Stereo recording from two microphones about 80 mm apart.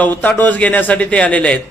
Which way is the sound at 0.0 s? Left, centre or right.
Centre.